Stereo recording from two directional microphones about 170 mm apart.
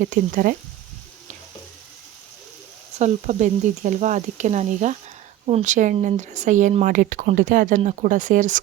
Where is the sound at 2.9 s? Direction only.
45° right (ahead or behind).